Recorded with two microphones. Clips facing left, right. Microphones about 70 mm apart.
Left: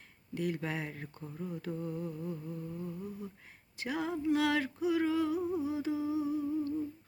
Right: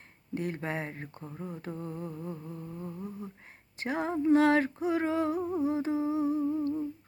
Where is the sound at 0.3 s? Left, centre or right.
Right.